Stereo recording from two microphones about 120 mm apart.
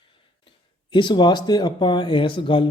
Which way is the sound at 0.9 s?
40° left (ahead or behind).